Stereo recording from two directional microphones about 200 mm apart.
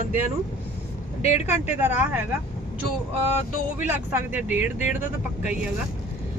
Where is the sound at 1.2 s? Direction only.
30° left (ahead or behind).